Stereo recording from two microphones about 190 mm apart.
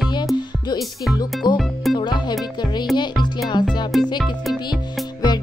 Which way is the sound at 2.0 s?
25° left (ahead or behind).